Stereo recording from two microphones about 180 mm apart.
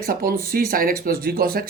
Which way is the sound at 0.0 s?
55° right (ahead or behind).